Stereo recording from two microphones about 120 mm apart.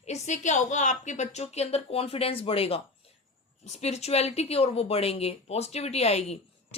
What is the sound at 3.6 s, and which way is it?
A woman's voice, 70° left (ahead or behind).